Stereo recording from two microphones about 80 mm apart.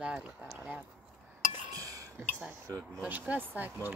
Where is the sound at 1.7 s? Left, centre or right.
Right.